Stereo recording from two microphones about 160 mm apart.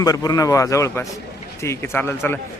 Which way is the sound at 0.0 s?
25° left (ahead or behind).